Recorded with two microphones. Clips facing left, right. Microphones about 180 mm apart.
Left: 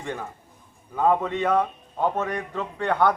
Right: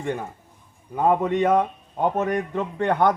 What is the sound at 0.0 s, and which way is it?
A man's voice, 20° right (ahead or behind).